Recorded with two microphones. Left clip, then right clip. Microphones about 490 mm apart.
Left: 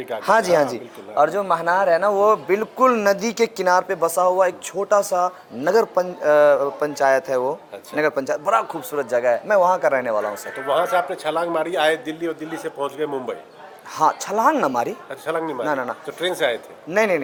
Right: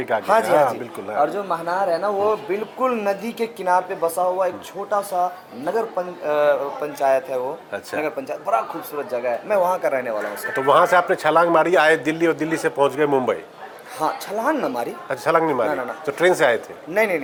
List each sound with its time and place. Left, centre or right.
0.3 s speech: left
10.7 s a man's voice: right
14.0 s speech: left
15.1 s a man's voice: right
16.9 s speech: left